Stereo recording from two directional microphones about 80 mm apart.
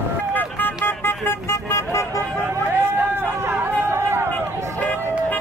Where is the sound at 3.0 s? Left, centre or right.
Right.